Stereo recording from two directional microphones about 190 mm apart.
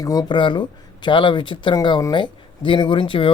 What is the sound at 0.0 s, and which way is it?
Speech, 20° left (ahead or behind).